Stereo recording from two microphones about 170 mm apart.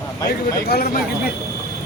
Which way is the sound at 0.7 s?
65° left (ahead or behind).